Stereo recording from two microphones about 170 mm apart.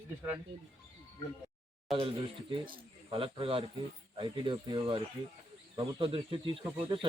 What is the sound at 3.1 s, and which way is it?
Speech, 30° right (ahead or behind).